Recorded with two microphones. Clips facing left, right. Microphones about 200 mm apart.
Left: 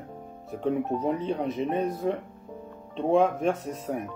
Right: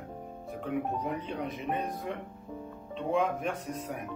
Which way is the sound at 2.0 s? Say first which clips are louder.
Left 9 dB; 35° left (ahead or behind).